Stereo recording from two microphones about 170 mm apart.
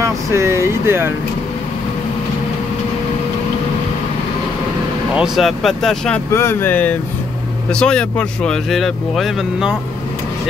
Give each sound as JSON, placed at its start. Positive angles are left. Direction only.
{"t": 0.0, "sound": "a sound", "side_deg": -15}
{"t": 5.1, "sound": "speech", "side_deg": -5}
{"t": 6.3, "sound": "speech", "side_deg": 15}